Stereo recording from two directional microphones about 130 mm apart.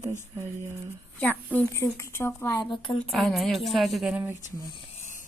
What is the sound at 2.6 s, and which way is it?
Speech, 40° left (ahead or behind).